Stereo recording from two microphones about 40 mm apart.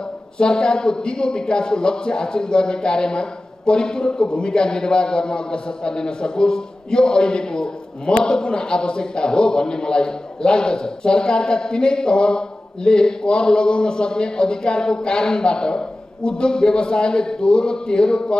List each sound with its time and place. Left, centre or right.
0.4 s speech: left